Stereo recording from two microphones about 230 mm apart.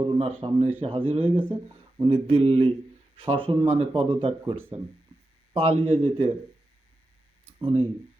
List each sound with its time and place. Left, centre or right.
0.0 s a sound: right
0.8 s speech: right
5.5 s speech: right
7.6 s speech: right